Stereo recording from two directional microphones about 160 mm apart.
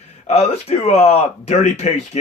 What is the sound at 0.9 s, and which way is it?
A man's voice, 40° left (ahead or behind).